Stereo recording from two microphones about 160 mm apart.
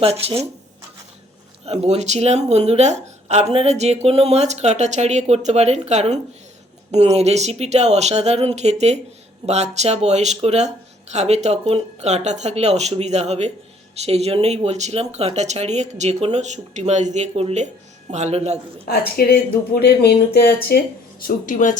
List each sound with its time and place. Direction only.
0.0 s speech: 40° right (ahead or behind)
1.6 s a woman's voice: 40° right (ahead or behind)
18.9 s speech: 75° left (ahead or behind); by 21.8 s 55° left (ahead or behind)